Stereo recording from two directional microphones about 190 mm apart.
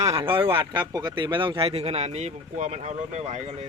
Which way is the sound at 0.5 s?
25° right (ahead or behind).